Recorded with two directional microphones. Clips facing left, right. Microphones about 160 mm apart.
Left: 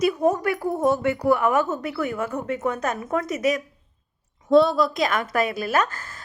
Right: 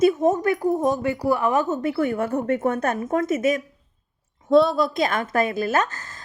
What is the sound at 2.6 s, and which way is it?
Speech, 55° right (ahead or behind).